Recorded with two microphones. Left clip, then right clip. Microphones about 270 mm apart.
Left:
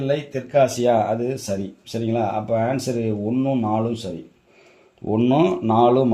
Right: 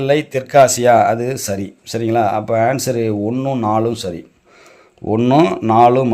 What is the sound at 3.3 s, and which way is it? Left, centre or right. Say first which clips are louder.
Speech: right 2 dB; right.